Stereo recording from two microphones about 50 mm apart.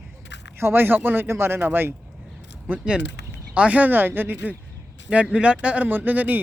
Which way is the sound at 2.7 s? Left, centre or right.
Right.